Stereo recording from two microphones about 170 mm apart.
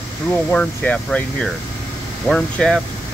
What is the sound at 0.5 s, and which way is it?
Speech, 10° left (ahead or behind).